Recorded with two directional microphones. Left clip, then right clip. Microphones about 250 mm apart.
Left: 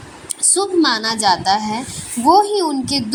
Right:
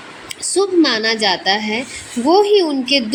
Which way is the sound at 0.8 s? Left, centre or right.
Left.